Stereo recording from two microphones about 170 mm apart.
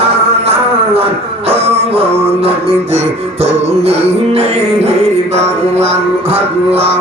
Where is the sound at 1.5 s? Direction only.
35° right (ahead or behind).